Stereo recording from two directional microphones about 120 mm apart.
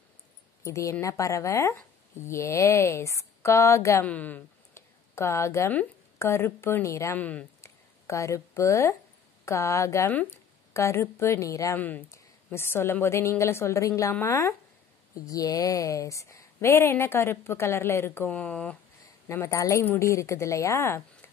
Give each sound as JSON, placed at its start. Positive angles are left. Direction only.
{"t": 0.7, "sound": "a woman's voice", "side_deg": 25}
{"t": 4.0, "sound": "a woman's voice", "side_deg": 15}
{"t": 7.2, "sound": "speech", "side_deg": 10}
{"t": 7.6, "sound": "a sound", "side_deg": 25}
{"t": 9.4, "sound": "a woman's voice", "side_deg": 25}
{"t": 19.2, "sound": "a woman's voice", "side_deg": 25}